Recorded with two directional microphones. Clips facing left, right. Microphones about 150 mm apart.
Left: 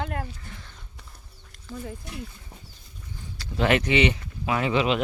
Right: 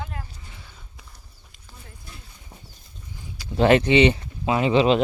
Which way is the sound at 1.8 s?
75° left (ahead or behind).